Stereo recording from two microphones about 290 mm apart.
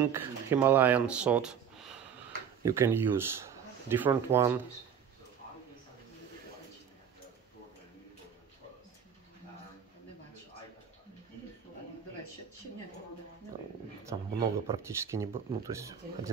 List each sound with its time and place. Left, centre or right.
0.1 s speech: centre
2.6 s speech: centre
14.0 s speech: centre